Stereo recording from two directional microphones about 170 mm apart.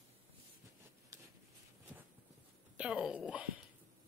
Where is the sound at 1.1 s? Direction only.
20° right (ahead or behind).